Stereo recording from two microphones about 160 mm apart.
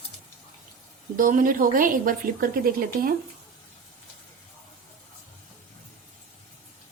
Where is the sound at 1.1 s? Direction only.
60° right (ahead or behind).